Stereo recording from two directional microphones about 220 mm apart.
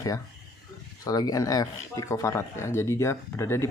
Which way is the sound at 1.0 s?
15° left (ahead or behind).